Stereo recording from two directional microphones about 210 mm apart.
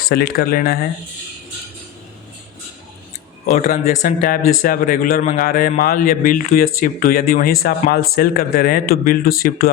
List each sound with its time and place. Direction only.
0.1 s speech: 45° left (ahead or behind)
3.5 s speech: 40° left (ahead or behind)